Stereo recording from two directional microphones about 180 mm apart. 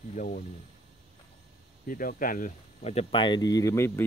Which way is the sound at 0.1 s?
50° left (ahead or behind).